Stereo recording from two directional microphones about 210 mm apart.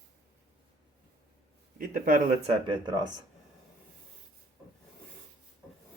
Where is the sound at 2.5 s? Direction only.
20° right (ahead or behind).